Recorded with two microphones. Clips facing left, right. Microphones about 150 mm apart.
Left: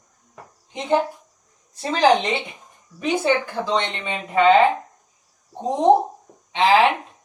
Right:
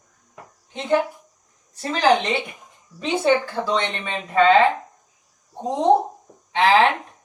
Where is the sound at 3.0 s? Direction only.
20° right (ahead or behind).